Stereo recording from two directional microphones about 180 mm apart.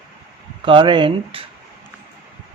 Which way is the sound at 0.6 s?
25° right (ahead or behind).